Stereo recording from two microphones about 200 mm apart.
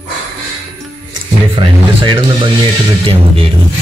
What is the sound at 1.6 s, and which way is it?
Speech, 25° right (ahead or behind).